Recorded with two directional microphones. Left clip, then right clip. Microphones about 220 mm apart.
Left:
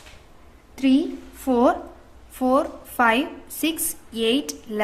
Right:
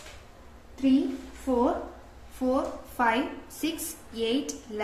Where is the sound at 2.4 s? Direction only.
40° left (ahead or behind).